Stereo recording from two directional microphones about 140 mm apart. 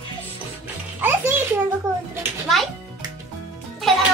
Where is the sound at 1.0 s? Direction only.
15° right (ahead or behind).